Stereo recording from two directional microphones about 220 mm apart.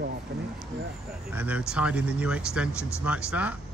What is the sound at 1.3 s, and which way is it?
Speech, 5° right (ahead or behind).